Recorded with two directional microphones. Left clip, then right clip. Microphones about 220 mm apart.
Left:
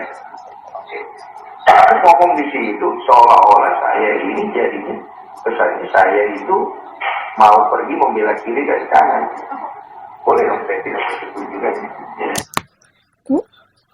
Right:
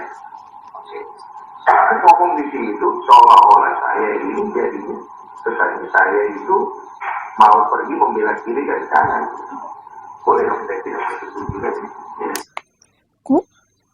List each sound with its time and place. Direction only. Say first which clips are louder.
1.6 s speech: left 3 dB; 20° right (ahead or behind)
10.2 s radio: left 2 dB; 20° right (ahead or behind)